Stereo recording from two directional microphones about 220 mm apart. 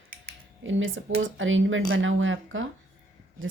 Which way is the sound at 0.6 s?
60° right (ahead or behind).